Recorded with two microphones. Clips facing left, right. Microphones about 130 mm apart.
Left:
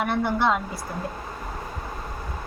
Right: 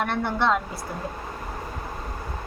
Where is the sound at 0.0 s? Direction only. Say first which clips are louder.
Left 1 dB; 5° left (ahead or behind).